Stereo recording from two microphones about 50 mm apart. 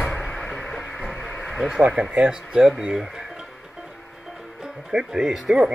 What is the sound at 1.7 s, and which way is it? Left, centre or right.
Speech, centre.